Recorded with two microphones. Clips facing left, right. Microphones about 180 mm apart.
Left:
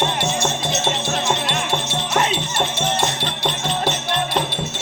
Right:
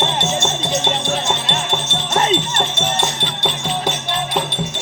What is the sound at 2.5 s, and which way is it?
Music, 10° left (ahead or behind).